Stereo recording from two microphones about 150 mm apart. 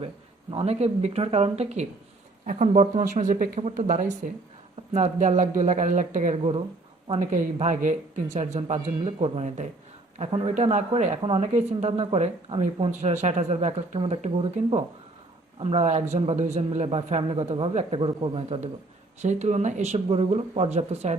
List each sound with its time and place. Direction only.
0.5 s speech: 45° right (ahead or behind)
2.5 s speech: 60° right (ahead or behind)
3.6 s speech: 50° right (ahead or behind)
6.3 s a man's voice: 40° right (ahead or behind)
7.2 s a man's voice: 55° right (ahead or behind)